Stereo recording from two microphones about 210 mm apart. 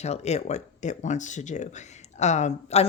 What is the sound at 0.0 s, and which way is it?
Speech, 30° left (ahead or behind).